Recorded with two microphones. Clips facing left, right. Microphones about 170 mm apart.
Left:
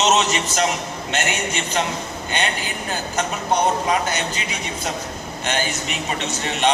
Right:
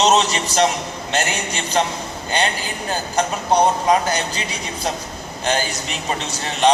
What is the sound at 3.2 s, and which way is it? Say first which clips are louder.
Speech: right 4 dB; 35° right (ahead or behind).